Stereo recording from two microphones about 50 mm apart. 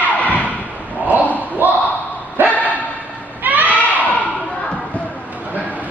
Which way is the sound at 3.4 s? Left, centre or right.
Right.